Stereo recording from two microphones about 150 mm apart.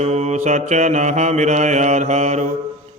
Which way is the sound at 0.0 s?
50° right (ahead or behind).